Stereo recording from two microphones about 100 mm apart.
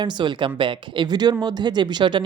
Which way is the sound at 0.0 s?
50° right (ahead or behind).